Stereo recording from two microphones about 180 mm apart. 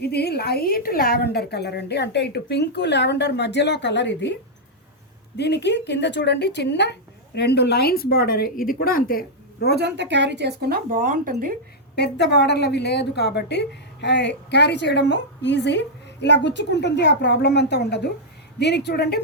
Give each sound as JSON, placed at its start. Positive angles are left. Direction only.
{"t": 0.0, "sound": "a woman's voice", "side_deg": 65}
{"t": 5.4, "sound": "a woman's voice", "side_deg": 70}
{"t": 9.7, "sound": "speech", "side_deg": -75}
{"t": 11.9, "sound": "a woman's voice", "side_deg": 65}